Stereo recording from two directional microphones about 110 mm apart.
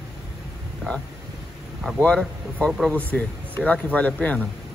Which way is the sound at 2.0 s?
10° left (ahead or behind).